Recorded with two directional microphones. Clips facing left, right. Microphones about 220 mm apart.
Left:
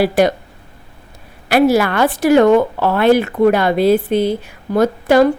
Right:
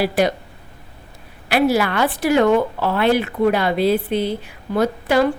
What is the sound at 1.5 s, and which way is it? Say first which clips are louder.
A woman's voice: left 5 dB; 45° left (ahead or behind).